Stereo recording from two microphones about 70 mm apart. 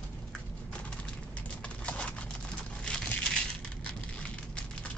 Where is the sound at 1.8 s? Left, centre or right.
Centre.